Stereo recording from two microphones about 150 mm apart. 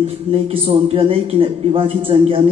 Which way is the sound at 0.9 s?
35° right (ahead or behind).